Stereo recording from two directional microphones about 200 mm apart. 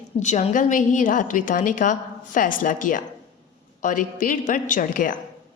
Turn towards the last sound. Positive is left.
turn(degrees=45)  # may be behind; listen again after turning